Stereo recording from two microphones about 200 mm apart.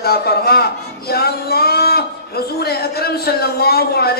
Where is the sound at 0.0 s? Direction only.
50° left (ahead or behind).